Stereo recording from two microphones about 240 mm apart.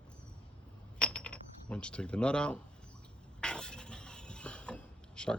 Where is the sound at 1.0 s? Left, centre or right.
Centre.